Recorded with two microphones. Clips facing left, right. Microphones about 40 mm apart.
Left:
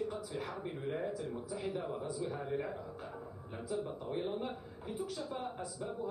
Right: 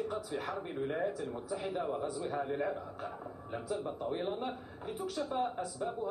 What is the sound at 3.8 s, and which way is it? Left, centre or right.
A man's voice, right.